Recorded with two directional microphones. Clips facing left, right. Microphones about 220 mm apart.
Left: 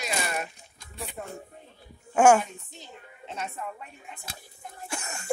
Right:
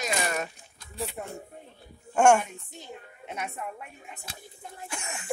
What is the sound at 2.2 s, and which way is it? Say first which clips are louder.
Speech: left 1 dB; 5° left (ahead or behind).